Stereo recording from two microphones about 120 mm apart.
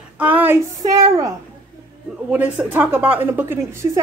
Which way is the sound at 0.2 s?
15° right (ahead or behind).